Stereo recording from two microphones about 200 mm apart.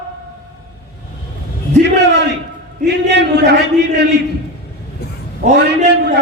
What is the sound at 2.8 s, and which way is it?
A man's voice, 60° right (ahead or behind).